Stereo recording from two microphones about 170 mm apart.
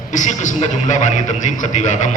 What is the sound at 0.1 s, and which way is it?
A man's voice, 45° left (ahead or behind).